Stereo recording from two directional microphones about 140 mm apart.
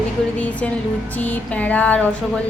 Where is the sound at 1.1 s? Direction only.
10° left (ahead or behind).